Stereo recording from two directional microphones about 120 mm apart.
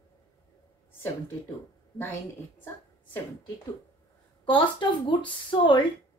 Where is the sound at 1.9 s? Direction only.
20° left (ahead or behind).